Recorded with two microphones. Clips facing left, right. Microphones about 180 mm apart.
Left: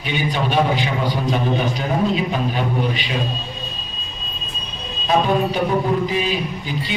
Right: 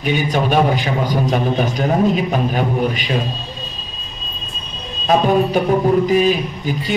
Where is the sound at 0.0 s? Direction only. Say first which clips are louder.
Right 4 dB; 45° right (ahead or behind).